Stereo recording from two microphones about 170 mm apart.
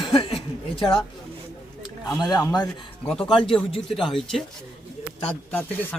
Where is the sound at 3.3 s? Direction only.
30° left (ahead or behind).